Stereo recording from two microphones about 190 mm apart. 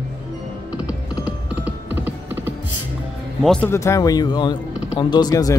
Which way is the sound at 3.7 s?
15° left (ahead or behind).